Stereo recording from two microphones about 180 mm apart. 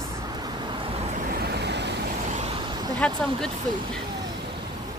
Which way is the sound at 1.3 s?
65° right (ahead or behind).